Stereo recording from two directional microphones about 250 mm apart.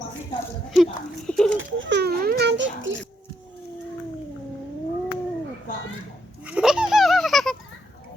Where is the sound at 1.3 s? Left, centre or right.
Centre.